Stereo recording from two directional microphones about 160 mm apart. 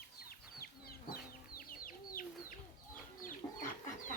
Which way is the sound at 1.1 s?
65° left (ahead or behind).